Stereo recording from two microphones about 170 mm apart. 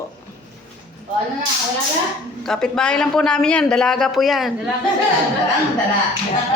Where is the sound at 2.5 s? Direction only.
5° left (ahead or behind).